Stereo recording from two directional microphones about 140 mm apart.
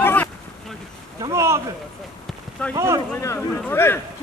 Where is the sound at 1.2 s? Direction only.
20° right (ahead or behind).